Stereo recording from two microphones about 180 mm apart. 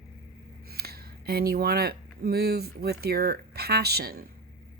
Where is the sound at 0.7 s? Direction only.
60° right (ahead or behind).